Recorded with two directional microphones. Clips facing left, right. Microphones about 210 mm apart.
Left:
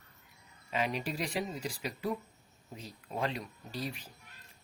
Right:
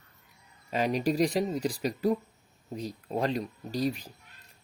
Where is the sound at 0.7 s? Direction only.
40° right (ahead or behind).